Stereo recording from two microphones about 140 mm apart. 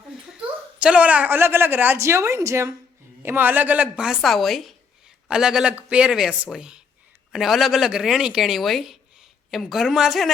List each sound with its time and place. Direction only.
0.3 s a woman's voice: 5° right (ahead or behind)